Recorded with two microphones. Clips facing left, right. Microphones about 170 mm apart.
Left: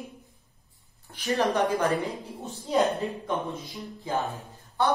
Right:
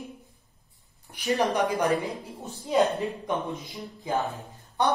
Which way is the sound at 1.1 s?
15° right (ahead or behind).